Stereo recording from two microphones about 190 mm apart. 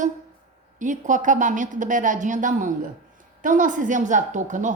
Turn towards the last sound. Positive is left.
turn(degrees=-40)  # may be behind; listen again after turning